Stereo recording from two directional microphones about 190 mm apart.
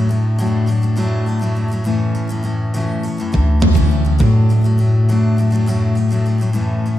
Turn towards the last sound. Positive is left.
turn(degrees=0)  # may be behind; listen again after turning